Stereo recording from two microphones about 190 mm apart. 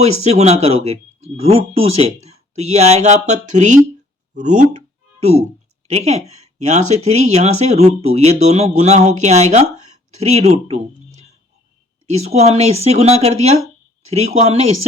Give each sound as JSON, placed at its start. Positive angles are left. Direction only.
{"t": 0.0, "sound": "speech", "side_deg": -35}
{"t": 5.9, "sound": "speech", "side_deg": -35}
{"t": 12.0, "sound": "speech", "side_deg": -35}